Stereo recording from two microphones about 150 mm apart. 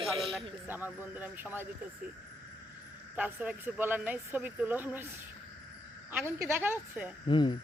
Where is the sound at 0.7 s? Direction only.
15° right (ahead or behind).